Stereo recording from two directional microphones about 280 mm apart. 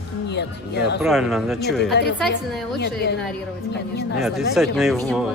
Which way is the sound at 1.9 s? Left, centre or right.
Left.